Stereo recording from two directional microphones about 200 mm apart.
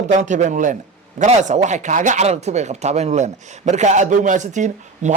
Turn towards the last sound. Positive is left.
turn(degrees=-35)  # may be behind; listen again after turning